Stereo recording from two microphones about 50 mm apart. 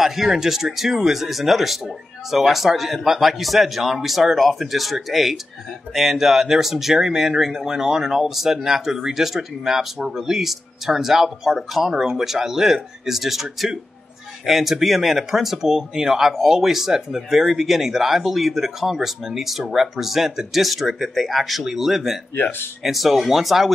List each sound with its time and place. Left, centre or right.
0.0 s speech: centre
22.3 s speech: left
22.8 s speech: centre